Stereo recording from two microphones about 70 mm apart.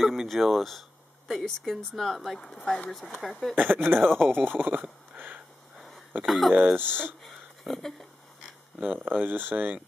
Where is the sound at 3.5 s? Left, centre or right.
Right.